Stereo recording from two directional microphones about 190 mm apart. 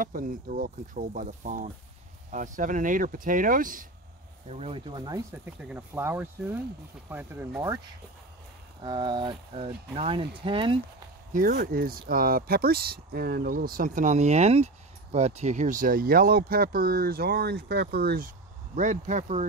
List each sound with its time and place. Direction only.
0.0 s speech: 45° right (ahead or behind)
4.5 s speech: 30° right (ahead or behind)
5.3 s speech: 10° right (ahead or behind)
8.8 s speech: 25° right (ahead or behind)
11.3 s speech: 45° right (ahead or behind)
18.8 s speech: 40° right (ahead or behind)